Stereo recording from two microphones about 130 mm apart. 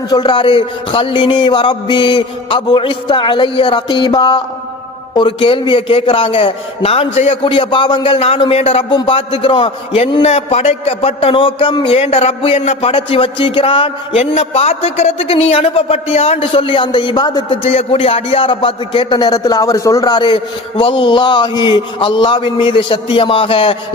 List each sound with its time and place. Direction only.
0.1 s a man's voice: 35° left (ahead or behind); by 7.3 s 55° left (ahead or behind)
7.4 s a man's voice: 40° left (ahead or behind)
8.9 s a man's voice: 40° left (ahead or behind)
14.3 s a man's voice: 55° left (ahead or behind); by 17.6 s 35° left (ahead or behind)
17.6 s a man's voice: 50° left (ahead or behind)